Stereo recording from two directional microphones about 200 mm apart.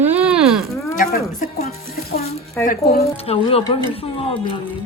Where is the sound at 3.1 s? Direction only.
30° left (ahead or behind).